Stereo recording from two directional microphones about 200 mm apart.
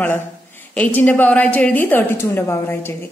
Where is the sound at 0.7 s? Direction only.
10° left (ahead or behind).